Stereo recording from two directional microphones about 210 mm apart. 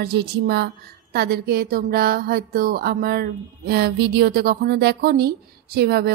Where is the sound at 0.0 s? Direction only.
50° right (ahead or behind).